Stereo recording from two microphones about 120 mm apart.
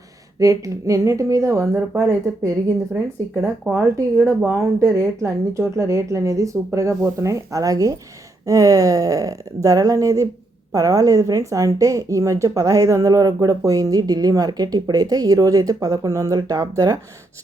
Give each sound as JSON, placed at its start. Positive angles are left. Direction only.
{"t": 0.3, "sound": "speech", "side_deg": -25}
{"t": 3.7, "sound": "speech", "side_deg": -15}